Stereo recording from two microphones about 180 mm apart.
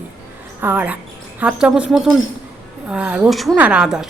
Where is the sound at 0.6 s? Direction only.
10° right (ahead or behind).